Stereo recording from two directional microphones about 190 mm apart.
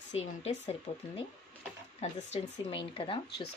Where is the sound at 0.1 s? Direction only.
35° left (ahead or behind).